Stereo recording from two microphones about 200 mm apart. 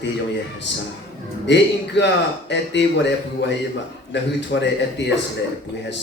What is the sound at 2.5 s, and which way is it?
A man's voice, 60° left (ahead or behind).